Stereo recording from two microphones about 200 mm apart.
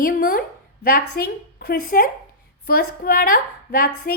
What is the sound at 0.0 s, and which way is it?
A woman's voice, 50° left (ahead or behind).